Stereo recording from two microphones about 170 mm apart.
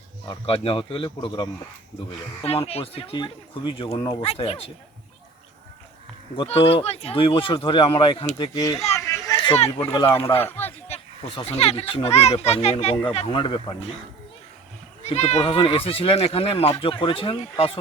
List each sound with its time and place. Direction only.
0.3 s speech: 35° left (ahead or behind)
6.3 s speech: 35° left (ahead or behind)
9.0 s a sound: 15° left (ahead or behind)
9.6 s speech: 35° left (ahead or behind)
10.3 s speech: 10° left (ahead or behind)
10.8 s speech: 35° left (ahead or behind)
15.0 s speech: 40° left (ahead or behind)